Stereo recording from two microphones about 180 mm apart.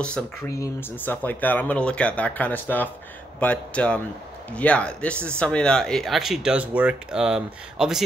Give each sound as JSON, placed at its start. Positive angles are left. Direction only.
{"t": 0.5, "sound": "speech", "side_deg": 15}